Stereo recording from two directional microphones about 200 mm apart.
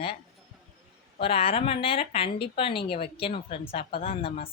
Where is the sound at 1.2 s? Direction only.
30° left (ahead or behind).